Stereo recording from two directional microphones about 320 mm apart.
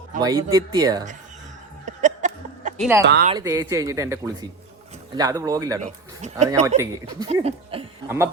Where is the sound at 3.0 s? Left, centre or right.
Right.